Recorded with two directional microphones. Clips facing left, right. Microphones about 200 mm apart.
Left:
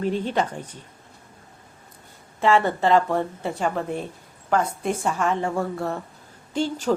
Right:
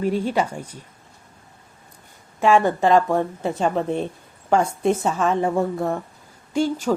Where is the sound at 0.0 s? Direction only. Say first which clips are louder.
Right 2 dB; 10° right (ahead or behind).